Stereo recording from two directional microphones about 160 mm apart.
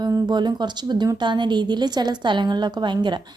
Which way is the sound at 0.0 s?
25° right (ahead or behind).